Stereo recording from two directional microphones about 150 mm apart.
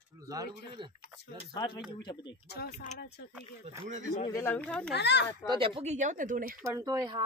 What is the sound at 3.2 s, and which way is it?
Speech, 90° left.